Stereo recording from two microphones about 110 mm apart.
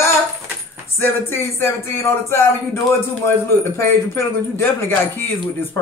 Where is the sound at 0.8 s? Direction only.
20° left (ahead or behind).